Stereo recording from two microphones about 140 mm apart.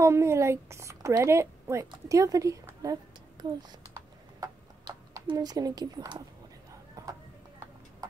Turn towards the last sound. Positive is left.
turn(degrees=-25)  # may be behind; listen again after turning